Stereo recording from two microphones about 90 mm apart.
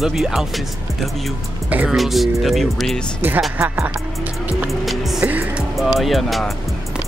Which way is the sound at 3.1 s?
20° right (ahead or behind).